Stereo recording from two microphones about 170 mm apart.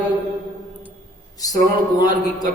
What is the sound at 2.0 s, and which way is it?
Speech, 25° left (ahead or behind).